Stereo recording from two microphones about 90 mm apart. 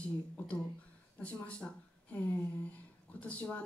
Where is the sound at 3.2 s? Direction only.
15° left (ahead or behind).